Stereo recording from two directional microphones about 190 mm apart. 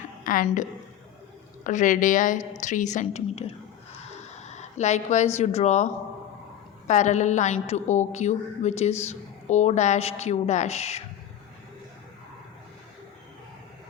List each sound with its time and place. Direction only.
0.3 s a woman's voice: 45° left (ahead or behind)
4.1 s a sound: 35° left (ahead or behind)
5.5 s a woman's voice: 40° left (ahead or behind)